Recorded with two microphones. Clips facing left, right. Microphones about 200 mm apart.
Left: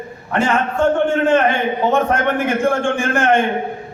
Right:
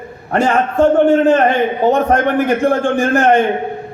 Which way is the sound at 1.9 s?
40° right (ahead or behind).